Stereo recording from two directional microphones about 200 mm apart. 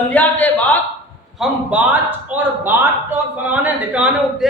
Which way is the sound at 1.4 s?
5° right (ahead or behind).